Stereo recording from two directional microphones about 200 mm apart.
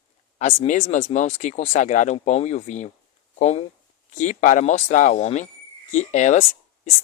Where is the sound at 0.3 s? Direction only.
35° left (ahead or behind).